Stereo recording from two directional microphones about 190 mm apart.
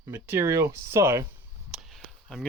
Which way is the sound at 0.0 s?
10° right (ahead or behind).